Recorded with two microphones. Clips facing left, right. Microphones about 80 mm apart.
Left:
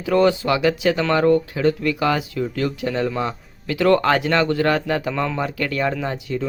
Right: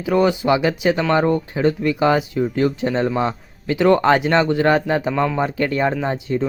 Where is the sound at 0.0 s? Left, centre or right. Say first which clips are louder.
Even; centre.